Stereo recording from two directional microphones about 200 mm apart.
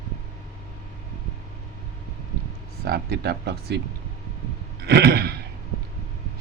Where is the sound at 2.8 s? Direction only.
55° right (ahead or behind).